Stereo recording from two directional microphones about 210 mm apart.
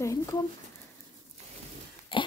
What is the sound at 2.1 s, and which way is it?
Pig, 25° left (ahead or behind).